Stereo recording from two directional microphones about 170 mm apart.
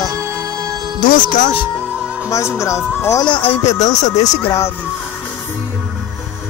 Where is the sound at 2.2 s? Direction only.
20° left (ahead or behind).